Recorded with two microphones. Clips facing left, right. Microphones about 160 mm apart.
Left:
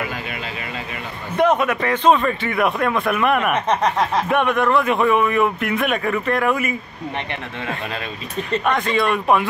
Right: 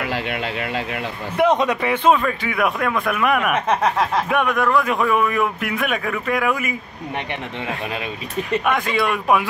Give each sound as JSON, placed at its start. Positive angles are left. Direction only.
{"t": 0.0, "sound": "vehicle", "side_deg": -75}
{"t": 1.4, "sound": "a man's voice", "side_deg": -20}
{"t": 8.5, "sound": "speech", "side_deg": -5}